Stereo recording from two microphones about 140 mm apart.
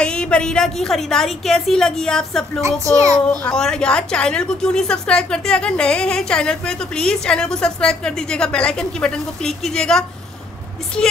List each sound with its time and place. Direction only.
0.0 s a woman's voice: 5° left (ahead or behind)
2.6 s a child's voice: 20° right (ahead or behind)
3.3 s a woman's voice: 5° left (ahead or behind)